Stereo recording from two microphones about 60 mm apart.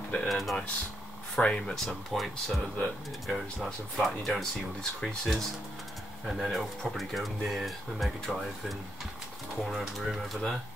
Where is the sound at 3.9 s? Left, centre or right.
Centre.